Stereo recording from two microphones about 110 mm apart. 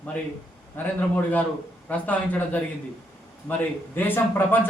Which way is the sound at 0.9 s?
15° left (ahead or behind).